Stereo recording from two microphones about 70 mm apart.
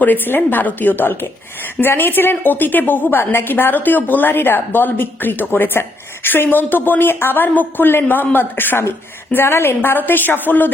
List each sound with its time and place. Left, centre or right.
0.0 s a woman's voice: left